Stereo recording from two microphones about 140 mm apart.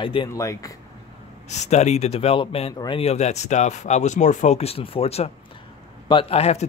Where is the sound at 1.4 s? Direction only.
55° left (ahead or behind); by 3.0 s 35° left (ahead or behind).